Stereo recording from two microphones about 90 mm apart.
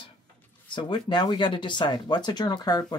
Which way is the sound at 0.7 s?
60° left (ahead or behind).